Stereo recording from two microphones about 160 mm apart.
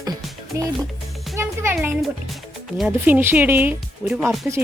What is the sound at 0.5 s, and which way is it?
Speech, 20° right (ahead or behind).